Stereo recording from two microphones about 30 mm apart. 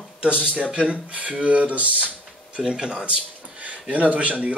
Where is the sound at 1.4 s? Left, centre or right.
Right.